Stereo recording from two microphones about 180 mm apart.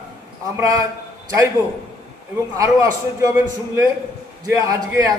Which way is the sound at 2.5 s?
20° right (ahead or behind).